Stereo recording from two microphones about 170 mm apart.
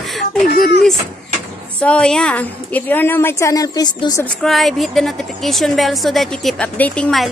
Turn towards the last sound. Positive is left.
turn(degrees=5)  # may be behind; listen again after turning